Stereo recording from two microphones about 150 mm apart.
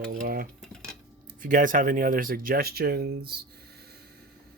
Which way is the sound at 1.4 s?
60° right (ahead or behind).